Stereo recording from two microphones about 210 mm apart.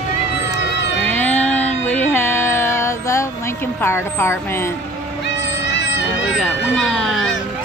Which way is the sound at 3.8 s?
10° left (ahead or behind).